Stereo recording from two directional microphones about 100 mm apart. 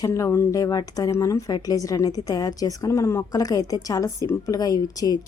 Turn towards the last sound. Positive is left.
turn(degrees=40)  # may be behind; listen again after turning